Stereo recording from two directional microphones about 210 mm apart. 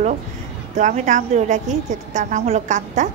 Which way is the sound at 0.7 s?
35° right (ahead or behind).